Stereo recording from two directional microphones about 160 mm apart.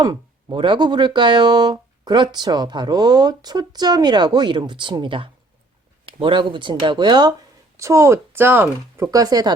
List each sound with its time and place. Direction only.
0.0 s speech: 30° right (ahead or behind)